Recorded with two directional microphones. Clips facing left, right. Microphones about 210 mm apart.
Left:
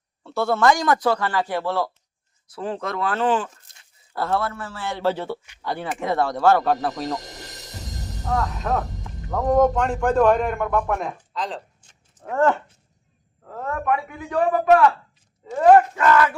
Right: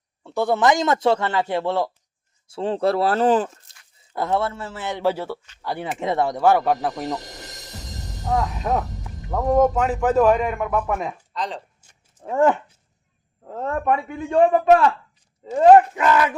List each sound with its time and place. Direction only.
0.2 s a man's voice: 15° right (ahead or behind); by 3.6 s 40° right (ahead or behind)
4.1 s a man's voice: 20° right (ahead or behind)
5.6 s speech: 15° right (ahead or behind)
8.7 s a man's voice: 20° right (ahead or behind)
9.5 s a man's voice: 5° right (ahead or behind)
13.4 s a man's voice: 25° right (ahead or behind)